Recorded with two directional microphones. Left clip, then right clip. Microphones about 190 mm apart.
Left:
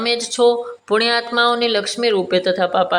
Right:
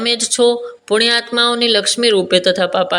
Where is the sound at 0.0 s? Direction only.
Centre (ahead or behind).